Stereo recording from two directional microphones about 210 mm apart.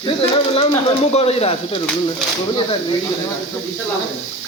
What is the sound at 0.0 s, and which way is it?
Speech, 25° left (ahead or behind).